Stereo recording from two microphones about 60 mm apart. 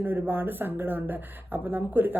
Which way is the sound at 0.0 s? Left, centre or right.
Right.